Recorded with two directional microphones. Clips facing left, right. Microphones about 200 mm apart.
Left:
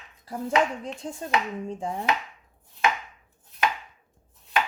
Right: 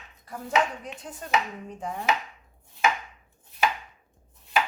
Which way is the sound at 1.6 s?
30° left (ahead or behind).